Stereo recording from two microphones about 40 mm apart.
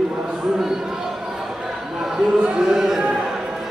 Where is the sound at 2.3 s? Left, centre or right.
Right.